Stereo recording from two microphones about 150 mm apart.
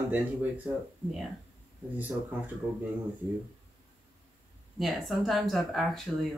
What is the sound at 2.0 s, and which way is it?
Speech, 10° right (ahead or behind).